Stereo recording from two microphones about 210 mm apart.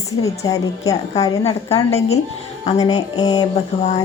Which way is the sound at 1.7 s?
30° left (ahead or behind).